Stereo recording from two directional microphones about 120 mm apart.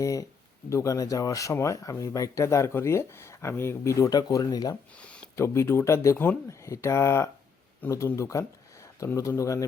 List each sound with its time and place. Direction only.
0.0 s speech: 25° left (ahead or behind)
4.9 s a sound: 10° left (ahead or behind)
5.4 s speech: 20° left (ahead or behind)